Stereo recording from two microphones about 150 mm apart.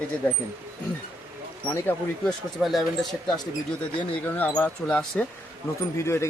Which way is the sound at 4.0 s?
10° left (ahead or behind).